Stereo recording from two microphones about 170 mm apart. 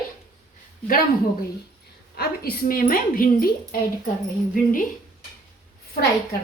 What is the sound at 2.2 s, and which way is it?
A woman's voice, 60° left (ahead or behind).